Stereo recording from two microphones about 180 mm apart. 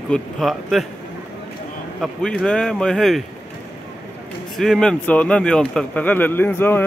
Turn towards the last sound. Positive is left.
turn(degrees=10)  # may be behind; listen again after turning